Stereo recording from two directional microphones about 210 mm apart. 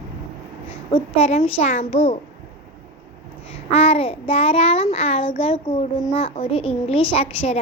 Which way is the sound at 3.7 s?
30° left (ahead or behind).